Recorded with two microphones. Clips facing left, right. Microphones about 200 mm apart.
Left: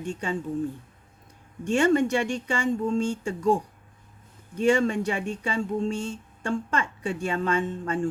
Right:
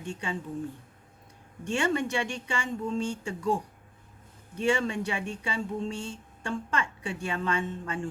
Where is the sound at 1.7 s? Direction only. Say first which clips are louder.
Left 7 dB; 45° left (ahead or behind).